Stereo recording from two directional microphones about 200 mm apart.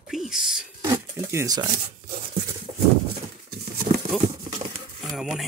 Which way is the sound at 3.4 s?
50° right (ahead or behind).